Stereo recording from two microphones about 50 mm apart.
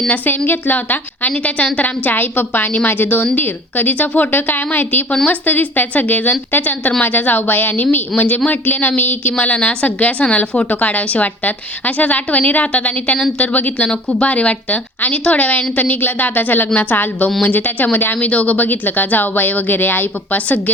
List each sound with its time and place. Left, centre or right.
0.1 s speech: left
1.3 s a woman's voice: left
9.3 s a woman's voice: left
13.8 s a woman's voice: centre; by 20.6 s left